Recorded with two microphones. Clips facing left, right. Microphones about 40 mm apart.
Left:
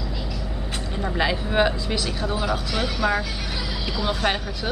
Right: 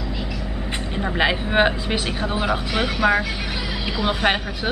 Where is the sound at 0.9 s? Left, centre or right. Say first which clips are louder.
Right 3 dB; right.